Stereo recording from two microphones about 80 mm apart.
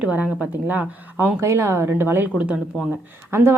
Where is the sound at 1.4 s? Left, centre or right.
Right.